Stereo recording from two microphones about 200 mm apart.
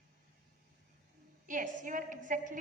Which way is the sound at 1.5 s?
40° right (ahead or behind).